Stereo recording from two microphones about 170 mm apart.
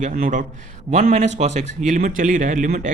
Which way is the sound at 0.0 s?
45° right (ahead or behind).